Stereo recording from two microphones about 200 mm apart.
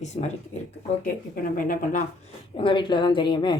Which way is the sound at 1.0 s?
45° left (ahead or behind).